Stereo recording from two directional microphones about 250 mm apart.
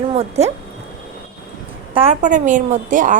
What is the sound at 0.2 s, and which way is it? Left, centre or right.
Speech, right.